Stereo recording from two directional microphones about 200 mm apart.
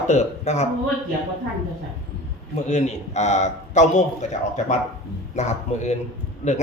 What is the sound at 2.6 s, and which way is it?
A man's voice, 35° left (ahead or behind).